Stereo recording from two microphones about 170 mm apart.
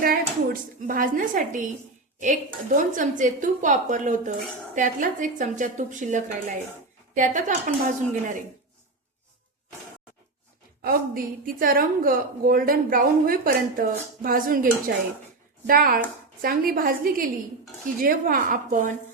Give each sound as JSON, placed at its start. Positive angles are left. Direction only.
{"t": 0.0, "sound": "speech", "side_deg": -55}
{"t": 10.8, "sound": "a woman's voice", "side_deg": -55}